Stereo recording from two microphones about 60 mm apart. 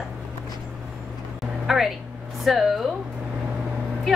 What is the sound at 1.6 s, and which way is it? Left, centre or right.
A woman's voice, centre.